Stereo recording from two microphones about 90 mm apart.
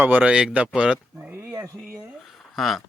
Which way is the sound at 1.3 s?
25° right (ahead or behind).